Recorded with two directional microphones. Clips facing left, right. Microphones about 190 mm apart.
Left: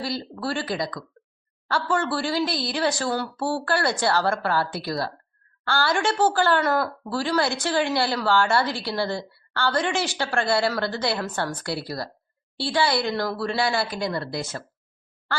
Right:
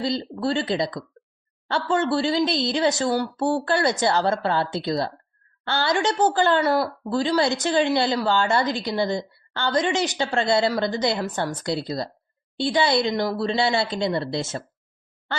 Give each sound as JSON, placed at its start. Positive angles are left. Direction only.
{"t": 0.0, "sound": "a woman's voice", "side_deg": -20}
{"t": 1.2, "sound": "a sound", "side_deg": -15}
{"t": 1.6, "sound": "a woman's voice", "side_deg": -20}